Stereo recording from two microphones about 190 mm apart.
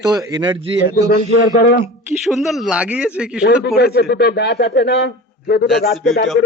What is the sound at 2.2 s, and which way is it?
A man's voice, centre (ahead or behind).